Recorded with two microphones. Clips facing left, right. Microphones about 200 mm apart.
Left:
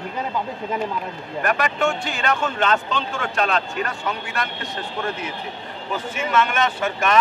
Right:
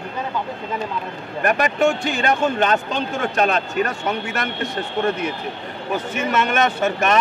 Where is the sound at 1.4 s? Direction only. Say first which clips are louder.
Right 4 dB; 40° right (ahead or behind).